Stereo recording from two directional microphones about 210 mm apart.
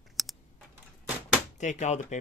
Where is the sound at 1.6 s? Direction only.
35° left (ahead or behind).